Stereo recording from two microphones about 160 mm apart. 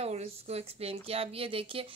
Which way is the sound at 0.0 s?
45° right (ahead or behind).